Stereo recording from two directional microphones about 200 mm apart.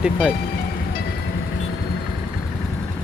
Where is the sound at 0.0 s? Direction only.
5° right (ahead or behind).